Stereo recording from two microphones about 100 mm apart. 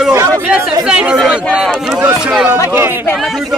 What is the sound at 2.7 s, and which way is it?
Speech, 20° right (ahead or behind).